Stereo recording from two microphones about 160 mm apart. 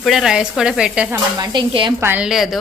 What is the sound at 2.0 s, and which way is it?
Speech, 10° right (ahead or behind).